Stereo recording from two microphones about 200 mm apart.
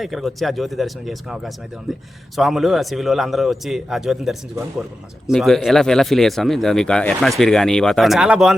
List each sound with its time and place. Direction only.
0.0 s speech: centre (ahead or behind)